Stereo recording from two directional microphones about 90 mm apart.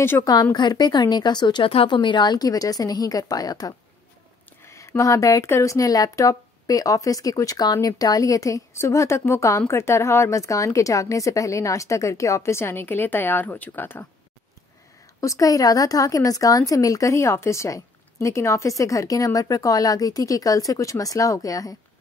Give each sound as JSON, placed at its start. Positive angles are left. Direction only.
{"t": 0.2, "sound": "a woman's voice", "side_deg": 45}
{"t": 4.6, "sound": "speech", "side_deg": 30}
{"t": 15.1, "sound": "speech", "side_deg": 35}